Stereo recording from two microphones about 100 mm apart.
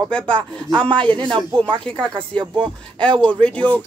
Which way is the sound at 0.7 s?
10° left (ahead or behind).